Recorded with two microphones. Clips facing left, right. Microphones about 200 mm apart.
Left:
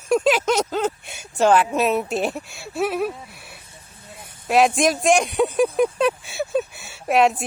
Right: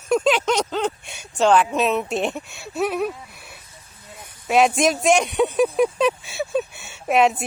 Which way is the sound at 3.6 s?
25° left (ahead or behind).